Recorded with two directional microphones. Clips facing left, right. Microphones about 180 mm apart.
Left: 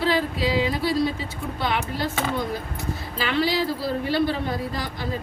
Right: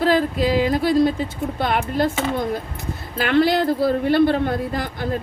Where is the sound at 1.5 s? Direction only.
50° right (ahead or behind).